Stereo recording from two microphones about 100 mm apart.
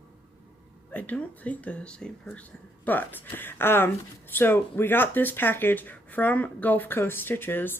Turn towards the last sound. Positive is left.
turn(degrees=20)  # may be behind; listen again after turning